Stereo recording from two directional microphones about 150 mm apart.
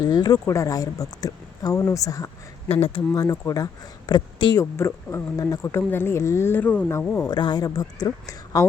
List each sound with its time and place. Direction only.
0.0 s speech: 25° left (ahead or behind)
4.8 s speech: 20° left (ahead or behind)
7.3 s speech: 30° left (ahead or behind)